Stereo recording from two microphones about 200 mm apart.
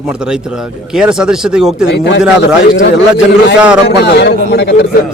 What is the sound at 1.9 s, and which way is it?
A man's voice, 60° left (ahead or behind).